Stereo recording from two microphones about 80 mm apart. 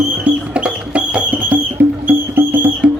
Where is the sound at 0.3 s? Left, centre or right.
Centre.